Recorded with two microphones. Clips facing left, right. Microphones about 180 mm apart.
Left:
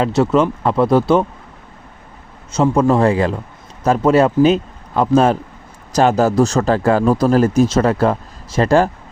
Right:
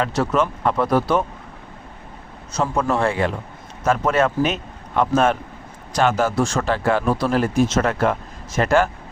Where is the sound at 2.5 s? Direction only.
30° left (ahead or behind).